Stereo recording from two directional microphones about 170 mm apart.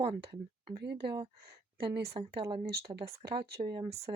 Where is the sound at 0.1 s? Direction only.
25° right (ahead or behind).